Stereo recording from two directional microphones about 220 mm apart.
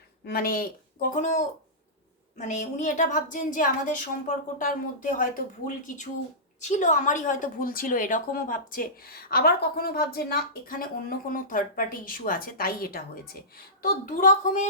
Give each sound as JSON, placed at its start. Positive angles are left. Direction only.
{"t": 0.3, "sound": "a woman's voice", "side_deg": 40}